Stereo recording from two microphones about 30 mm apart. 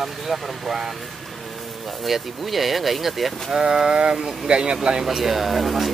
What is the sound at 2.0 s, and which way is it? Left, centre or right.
Speech, centre.